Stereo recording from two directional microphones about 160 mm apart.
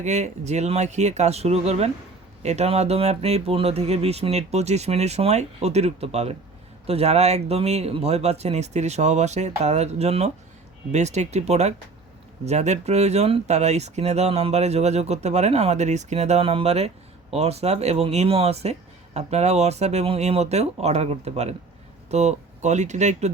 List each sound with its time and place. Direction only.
0.0 s speech: 45° right (ahead or behind)